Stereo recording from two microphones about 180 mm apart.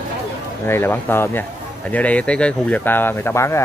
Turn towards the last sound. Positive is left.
turn(degrees=15)  # may be behind; listen again after turning